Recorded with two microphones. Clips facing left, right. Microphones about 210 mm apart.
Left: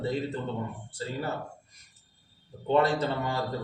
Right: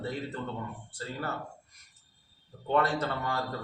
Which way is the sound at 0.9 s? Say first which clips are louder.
Left 4 dB; 20° left (ahead or behind).